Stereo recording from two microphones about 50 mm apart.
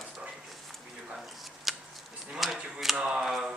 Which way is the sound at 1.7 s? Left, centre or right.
Centre.